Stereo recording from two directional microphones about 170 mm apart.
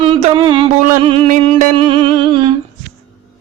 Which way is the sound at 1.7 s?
30° right (ahead or behind).